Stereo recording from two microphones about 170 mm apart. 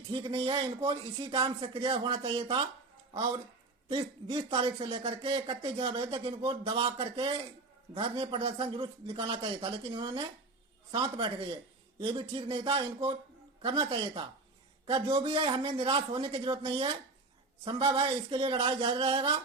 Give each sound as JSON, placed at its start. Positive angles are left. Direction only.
{"t": 0.1, "sound": "speech", "side_deg": -30}
{"t": 3.8, "sound": "speech", "side_deg": -30}